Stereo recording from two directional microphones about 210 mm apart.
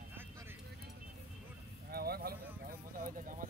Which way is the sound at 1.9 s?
45° right (ahead or behind).